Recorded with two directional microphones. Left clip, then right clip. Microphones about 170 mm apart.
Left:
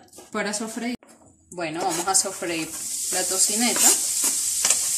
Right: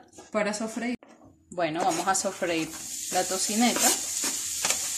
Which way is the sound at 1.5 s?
45° right (ahead or behind).